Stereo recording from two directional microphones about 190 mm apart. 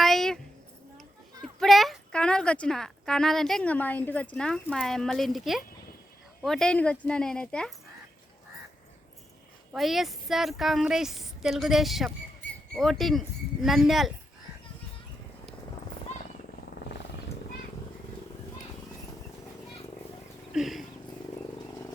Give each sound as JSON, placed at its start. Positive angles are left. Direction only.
{"t": 0.0, "sound": "a sound", "side_deg": 0}
{"t": 1.5, "sound": "a woman's voice", "side_deg": 0}
{"t": 9.7, "sound": "speech", "side_deg": 0}
{"t": 20.5, "sound": "cat", "side_deg": 0}